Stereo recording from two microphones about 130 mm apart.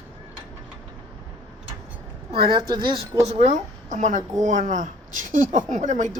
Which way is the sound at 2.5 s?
35° right (ahead or behind).